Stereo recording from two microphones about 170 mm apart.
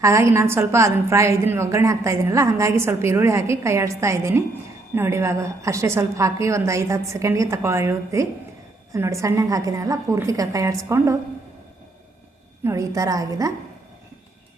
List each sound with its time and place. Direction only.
0.0 s a woman's voice: 15° right (ahead or behind)
12.6 s a woman's voice: 20° right (ahead or behind)